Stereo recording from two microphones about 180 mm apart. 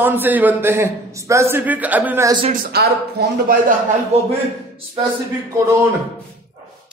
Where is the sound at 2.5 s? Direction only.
60° right (ahead or behind).